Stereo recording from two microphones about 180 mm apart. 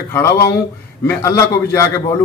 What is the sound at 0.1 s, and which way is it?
A man's voice, 15° left (ahead or behind).